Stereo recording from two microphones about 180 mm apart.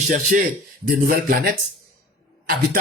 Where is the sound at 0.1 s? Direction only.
45° right (ahead or behind).